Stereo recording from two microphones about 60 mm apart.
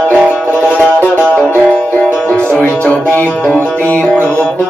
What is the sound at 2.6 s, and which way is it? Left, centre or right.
Music, left.